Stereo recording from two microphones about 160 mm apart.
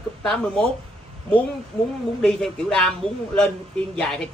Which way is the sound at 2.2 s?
5° left (ahead or behind).